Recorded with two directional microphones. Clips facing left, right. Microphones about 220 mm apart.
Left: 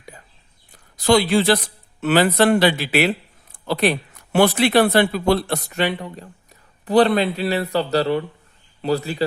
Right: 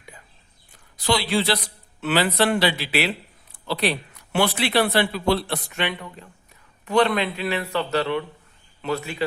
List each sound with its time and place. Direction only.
0.9 s speech: 45° left (ahead or behind)